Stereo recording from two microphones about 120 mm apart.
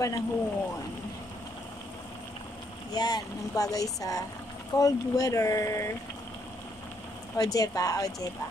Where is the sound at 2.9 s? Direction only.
35° left (ahead or behind).